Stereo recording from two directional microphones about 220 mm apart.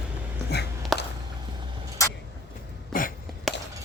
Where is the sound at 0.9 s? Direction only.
Centre (ahead or behind).